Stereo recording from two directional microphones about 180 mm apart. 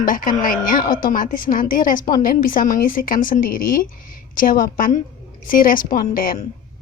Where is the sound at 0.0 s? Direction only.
50° left (ahead or behind).